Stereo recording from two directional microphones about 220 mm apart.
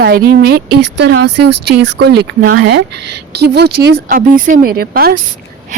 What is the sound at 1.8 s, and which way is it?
Speech, 50° right (ahead or behind).